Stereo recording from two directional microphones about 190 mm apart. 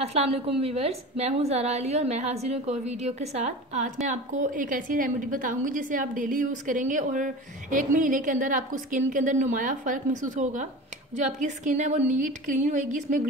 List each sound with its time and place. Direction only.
0.0 s a woman's voice: 35° right (ahead or behind)